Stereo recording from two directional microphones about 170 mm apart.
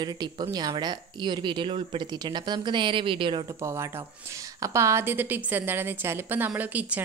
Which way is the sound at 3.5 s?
15° right (ahead or behind).